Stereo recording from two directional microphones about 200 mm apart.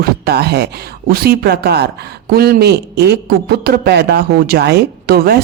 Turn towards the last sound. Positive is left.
turn(degrees=-50)  # may be behind; listen again after turning